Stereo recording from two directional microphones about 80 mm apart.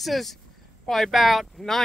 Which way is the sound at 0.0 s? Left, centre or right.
Centre.